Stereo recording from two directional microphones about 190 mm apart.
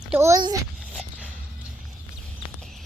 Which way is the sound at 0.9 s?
5° right (ahead or behind).